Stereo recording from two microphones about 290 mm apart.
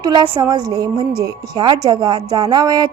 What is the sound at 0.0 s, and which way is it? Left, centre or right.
A woman's voice, centre.